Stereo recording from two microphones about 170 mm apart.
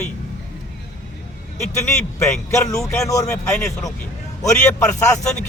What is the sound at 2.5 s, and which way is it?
Speech, 15° left (ahead or behind).